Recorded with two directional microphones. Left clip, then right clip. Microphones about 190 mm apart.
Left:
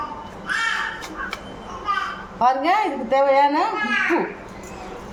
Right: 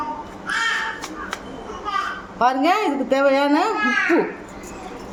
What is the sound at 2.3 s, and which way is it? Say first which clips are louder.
A woman's voice: even; 25° right (ahead or behind).